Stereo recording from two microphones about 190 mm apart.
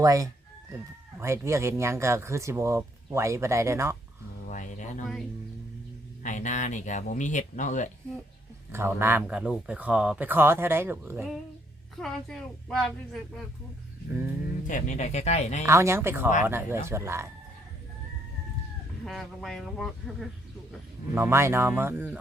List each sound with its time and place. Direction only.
0.0 s speech: 15° right (ahead or behind)
4.4 s a sound: 40° left (ahead or behind)
6.2 s speech: 40° left (ahead or behind)
8.7 s speech: 15° right (ahead or behind)
11.9 s speech: centre (ahead or behind)
14.7 s speech: 40° left (ahead or behind)
15.6 s speech: 15° right (ahead or behind)
19.0 s speech: centre (ahead or behind)
21.2 s speech: 15° right (ahead or behind)